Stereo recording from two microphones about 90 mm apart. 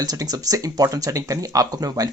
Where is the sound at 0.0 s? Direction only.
45° right (ahead or behind).